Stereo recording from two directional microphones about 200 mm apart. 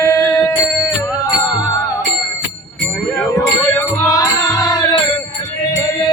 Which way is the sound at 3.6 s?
15° left (ahead or behind).